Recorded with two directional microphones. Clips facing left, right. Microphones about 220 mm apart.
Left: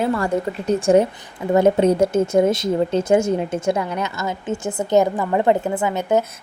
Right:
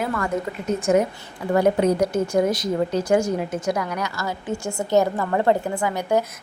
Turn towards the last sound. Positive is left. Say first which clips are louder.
# left 3 dB
turn(degrees=20)  # may be behind; listen again after turning